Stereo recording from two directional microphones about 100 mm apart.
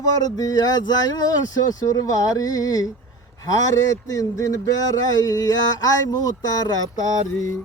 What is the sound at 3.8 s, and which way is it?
Speech, 35° left (ahead or behind).